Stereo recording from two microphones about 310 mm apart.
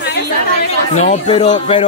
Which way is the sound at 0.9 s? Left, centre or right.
Left.